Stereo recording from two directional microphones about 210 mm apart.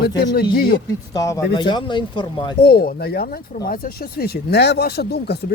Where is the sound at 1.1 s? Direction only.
15° left (ahead or behind).